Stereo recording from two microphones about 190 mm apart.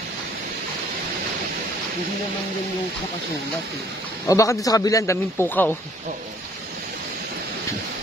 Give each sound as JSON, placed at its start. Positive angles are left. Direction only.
{"t": 4.3, "sound": "speech", "side_deg": 15}